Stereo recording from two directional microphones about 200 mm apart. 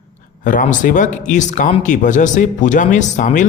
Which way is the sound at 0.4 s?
40° left (ahead or behind).